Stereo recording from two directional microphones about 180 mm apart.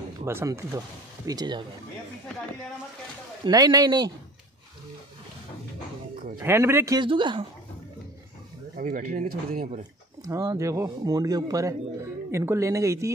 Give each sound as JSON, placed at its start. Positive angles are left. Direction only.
{"t": 0.2, "sound": "speech", "side_deg": -15}
{"t": 3.4, "sound": "speech", "side_deg": -20}
{"t": 6.4, "sound": "speech", "side_deg": -15}
{"t": 8.7, "sound": "speech", "side_deg": -45}
{"t": 10.2, "sound": "a man's voice", "side_deg": -20}